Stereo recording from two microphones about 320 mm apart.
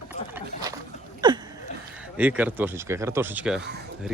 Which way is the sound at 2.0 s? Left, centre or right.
Centre.